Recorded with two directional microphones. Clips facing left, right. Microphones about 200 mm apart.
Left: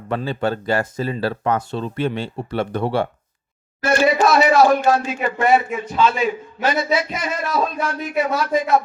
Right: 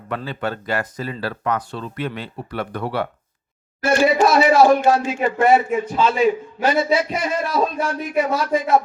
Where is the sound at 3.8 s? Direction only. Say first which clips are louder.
Right 1 dB; 10° right (ahead or behind).